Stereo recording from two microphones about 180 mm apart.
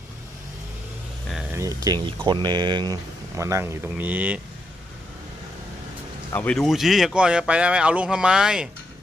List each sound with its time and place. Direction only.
1.5 s speech: 20° right (ahead or behind)
6.3 s speech: 5° left (ahead or behind)